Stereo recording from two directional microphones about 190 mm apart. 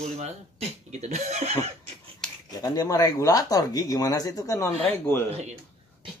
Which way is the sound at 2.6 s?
20° left (ahead or behind).